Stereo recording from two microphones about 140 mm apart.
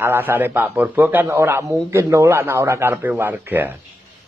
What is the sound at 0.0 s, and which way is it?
A man's voice, 15° right (ahead or behind).